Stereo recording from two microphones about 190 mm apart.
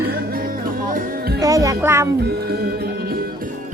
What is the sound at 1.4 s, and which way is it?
Speech, 20° right (ahead or behind).